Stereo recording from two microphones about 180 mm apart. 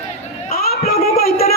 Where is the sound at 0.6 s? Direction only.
55° left (ahead or behind).